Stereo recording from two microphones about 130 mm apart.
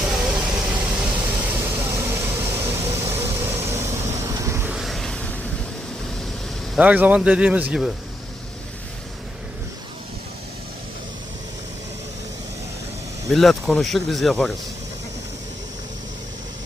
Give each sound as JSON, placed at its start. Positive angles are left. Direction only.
{"t": 0.1, "sound": "vehicle", "side_deg": -5}
{"t": 4.7, "sound": "a sound", "side_deg": 0}
{"t": 6.7, "sound": "speech", "side_deg": -10}
{"t": 13.3, "sound": "speech", "side_deg": 0}